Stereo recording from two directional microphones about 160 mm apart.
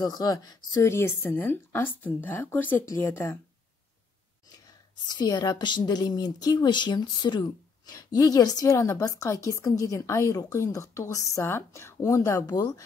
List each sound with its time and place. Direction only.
0.0 s a woman's voice: 25° left (ahead or behind)
5.0 s a woman's voice: 25° left (ahead or behind)